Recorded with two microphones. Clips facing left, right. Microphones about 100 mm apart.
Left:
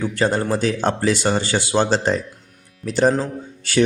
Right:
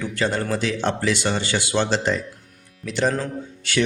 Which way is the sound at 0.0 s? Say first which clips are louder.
Left 4 dB; 35° left (ahead or behind).